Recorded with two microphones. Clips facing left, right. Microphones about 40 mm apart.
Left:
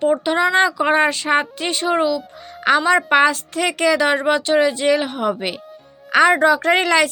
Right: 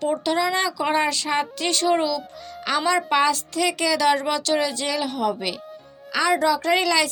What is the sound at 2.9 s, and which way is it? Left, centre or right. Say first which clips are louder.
A woman's voice: left 3 dB; left.